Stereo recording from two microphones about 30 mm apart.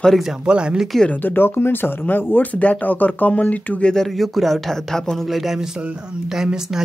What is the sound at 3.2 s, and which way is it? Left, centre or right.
Speech, left.